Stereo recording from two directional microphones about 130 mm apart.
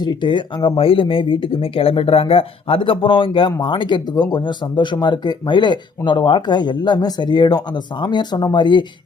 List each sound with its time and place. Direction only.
0.0 s speech: 35° left (ahead or behind)